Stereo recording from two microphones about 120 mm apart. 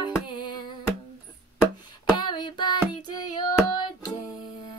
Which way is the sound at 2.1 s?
40° left (ahead or behind).